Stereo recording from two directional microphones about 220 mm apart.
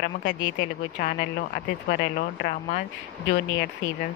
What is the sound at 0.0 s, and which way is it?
Speech, 40° left (ahead or behind).